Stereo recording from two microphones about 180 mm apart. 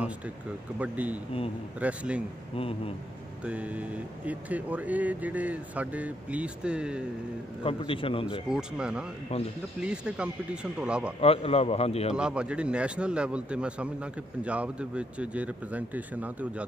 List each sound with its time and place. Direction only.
0.7 s a man's voice: 10° right (ahead or behind)
3.4 s a man's voice: 10° right (ahead or behind)
7.6 s a man's voice: 30° left (ahead or behind)
8.5 s speech: 5° right (ahead or behind)
11.1 s a man's voice: 35° left (ahead or behind)
12.1 s a man's voice: 5° right (ahead or behind)